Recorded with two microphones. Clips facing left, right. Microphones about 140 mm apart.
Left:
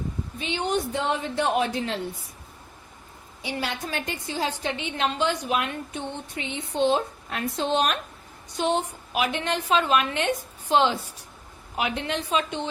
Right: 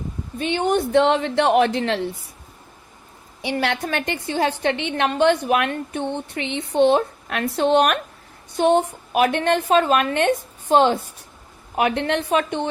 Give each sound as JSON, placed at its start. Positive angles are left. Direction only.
{"t": 0.3, "sound": "a woman's voice", "side_deg": -55}
{"t": 3.4, "sound": "a woman's voice", "side_deg": -70}
{"t": 11.8, "sound": "a woman's voice", "side_deg": -60}